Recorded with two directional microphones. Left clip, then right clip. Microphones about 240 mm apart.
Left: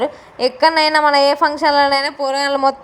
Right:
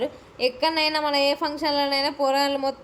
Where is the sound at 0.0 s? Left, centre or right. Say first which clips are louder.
Left 7 dB; centre.